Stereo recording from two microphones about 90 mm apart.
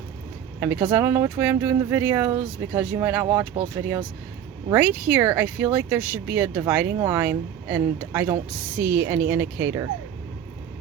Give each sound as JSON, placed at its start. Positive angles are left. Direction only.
{"t": 0.6, "sound": "speech", "side_deg": -30}
{"t": 3.8, "sound": "speech", "side_deg": -35}
{"t": 4.7, "sound": "speech", "side_deg": -20}